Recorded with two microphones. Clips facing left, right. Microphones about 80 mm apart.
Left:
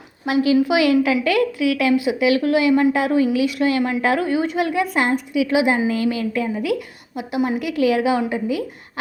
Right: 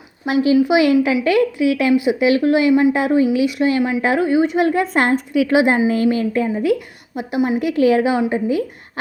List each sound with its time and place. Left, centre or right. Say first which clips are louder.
0.6 s a woman's voice: right 2 dB; right